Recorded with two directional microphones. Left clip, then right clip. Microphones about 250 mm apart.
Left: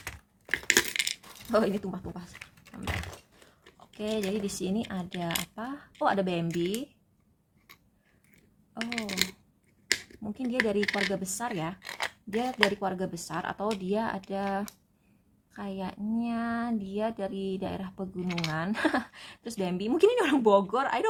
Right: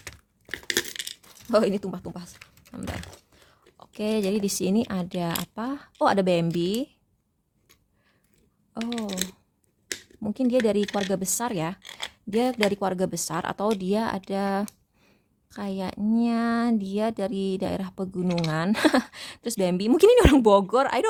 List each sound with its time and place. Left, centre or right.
0.5 s crushing: centre
1.5 s speech: right
2.9 s a sound: centre
3.8 s speech: right
10.2 s speech: right
11.9 s a sound: centre
12.3 s speech: right